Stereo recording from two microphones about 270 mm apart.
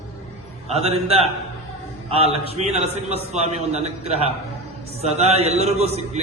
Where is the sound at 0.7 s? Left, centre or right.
Right.